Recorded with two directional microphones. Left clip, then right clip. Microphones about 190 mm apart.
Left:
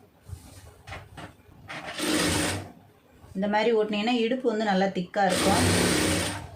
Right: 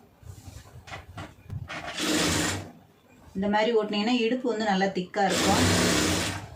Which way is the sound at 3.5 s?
40° left (ahead or behind).